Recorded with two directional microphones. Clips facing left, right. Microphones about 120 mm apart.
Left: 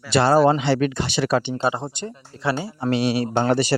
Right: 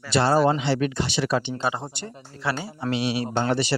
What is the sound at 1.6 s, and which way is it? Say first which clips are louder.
Speech: left 4 dB; 30° left (ahead or behind).